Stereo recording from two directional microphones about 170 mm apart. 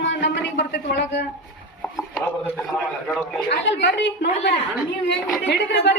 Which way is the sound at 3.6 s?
90° left.